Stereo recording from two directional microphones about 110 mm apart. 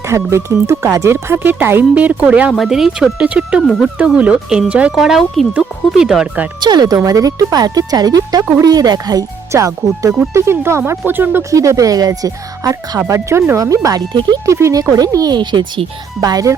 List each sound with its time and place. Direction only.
0.1 s speech: 25° right (ahead or behind)
2.5 s speech: 5° right (ahead or behind)
6.6 s speech: 40° right (ahead or behind)
14.4 s speech: 30° right (ahead or behind)